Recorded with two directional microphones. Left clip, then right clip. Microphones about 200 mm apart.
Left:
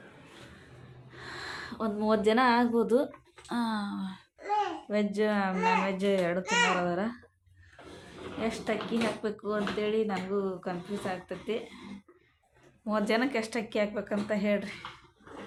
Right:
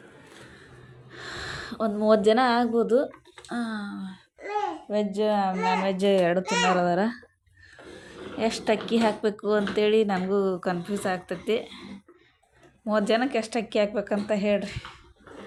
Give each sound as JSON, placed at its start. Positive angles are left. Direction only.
{"t": 1.1, "sound": "speech", "side_deg": -15}
{"t": 8.4, "sound": "speech", "side_deg": -20}
{"t": 12.9, "sound": "speech", "side_deg": -20}